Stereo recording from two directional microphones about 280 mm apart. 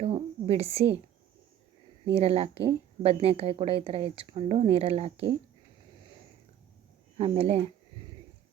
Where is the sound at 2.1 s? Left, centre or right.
Right.